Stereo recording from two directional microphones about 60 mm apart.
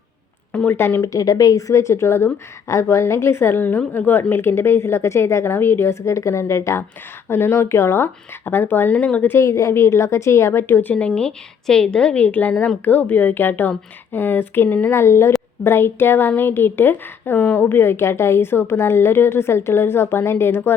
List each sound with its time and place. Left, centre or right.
0.5 s a woman's voice: left
0.8 s a woman's voice: left
1.0 s speech: left
2.6 s a woman's voice: left
7.3 s a woman's voice: left
9.0 s a woman's voice: left
9.4 s a woman's voice: left
11.1 s a woman's voice: centre; by 14.9 s left
14.9 s a woman's voice: left